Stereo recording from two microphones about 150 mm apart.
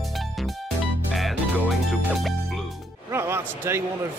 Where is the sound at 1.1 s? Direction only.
Centre (ahead or behind).